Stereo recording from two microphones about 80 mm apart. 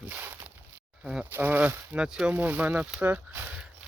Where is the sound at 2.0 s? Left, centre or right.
Centre.